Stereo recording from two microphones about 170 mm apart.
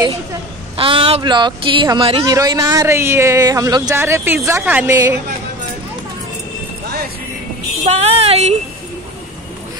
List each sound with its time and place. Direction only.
0.7 s speech: 30° right (ahead or behind)
2.3 s speech: 20° right (ahead or behind)
7.8 s speech: 40° right (ahead or behind)